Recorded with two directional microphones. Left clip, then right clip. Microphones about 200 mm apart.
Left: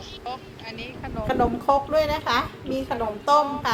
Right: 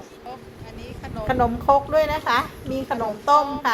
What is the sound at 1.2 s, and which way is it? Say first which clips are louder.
A woman's voice: right 2 dB; 5° right (ahead or behind).